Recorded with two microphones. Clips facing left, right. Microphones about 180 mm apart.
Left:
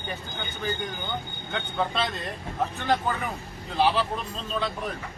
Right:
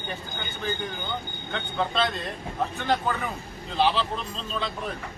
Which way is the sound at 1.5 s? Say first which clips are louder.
Even; 10° left (ahead or behind).